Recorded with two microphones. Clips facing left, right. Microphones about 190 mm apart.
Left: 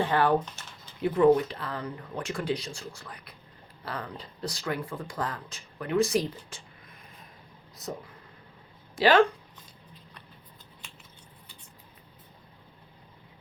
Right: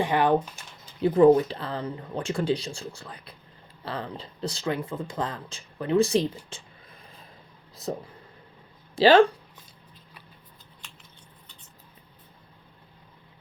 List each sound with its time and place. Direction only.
0.0 s speech: 15° right (ahead or behind)
1.0 s speech: 30° right (ahead or behind)
7.8 s speech: 30° right (ahead or behind)
9.0 s speech: 30° right (ahead or behind)